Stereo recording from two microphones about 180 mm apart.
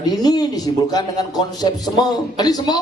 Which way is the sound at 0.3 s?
20° left (ahead or behind).